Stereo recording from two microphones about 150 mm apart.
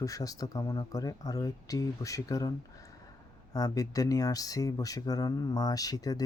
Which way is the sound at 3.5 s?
25° left (ahead or behind).